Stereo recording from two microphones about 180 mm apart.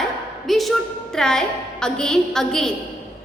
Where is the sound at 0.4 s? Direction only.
Centre (ahead or behind).